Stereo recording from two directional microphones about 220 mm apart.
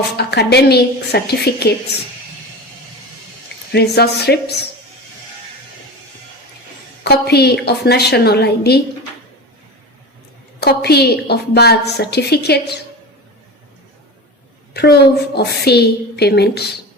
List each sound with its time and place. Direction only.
0.2 s a woman's voice: 50° left (ahead or behind)
3.7 s a woman's voice: 50° left (ahead or behind)
7.0 s a woman's voice: 45° left (ahead or behind)
10.6 s a woman's voice: 45° left (ahead or behind)
14.7 s a woman's voice: 45° left (ahead or behind)